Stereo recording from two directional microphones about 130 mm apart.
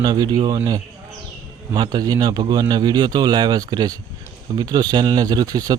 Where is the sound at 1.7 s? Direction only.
35° right (ahead or behind).